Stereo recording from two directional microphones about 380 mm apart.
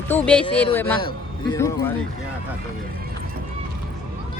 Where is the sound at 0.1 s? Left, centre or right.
Centre.